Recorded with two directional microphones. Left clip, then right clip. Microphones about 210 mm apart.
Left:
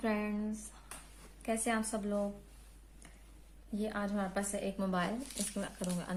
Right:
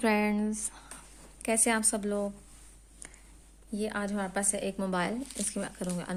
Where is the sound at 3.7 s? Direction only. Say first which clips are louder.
Right 4 dB; 40° right (ahead or behind).